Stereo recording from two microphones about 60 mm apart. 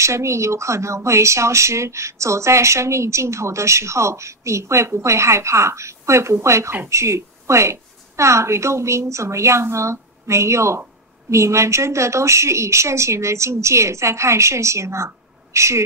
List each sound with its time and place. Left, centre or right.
0.0 s a woman's voice: right